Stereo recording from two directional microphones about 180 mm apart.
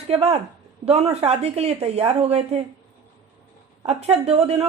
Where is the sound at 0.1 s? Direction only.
35° right (ahead or behind).